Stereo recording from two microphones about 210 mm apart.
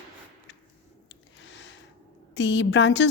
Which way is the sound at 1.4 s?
60° left (ahead or behind).